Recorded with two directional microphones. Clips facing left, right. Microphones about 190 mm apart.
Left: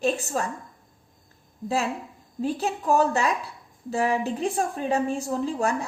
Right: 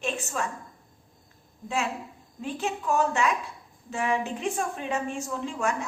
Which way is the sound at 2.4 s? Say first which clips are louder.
Left 4 dB; 35° left (ahead or behind).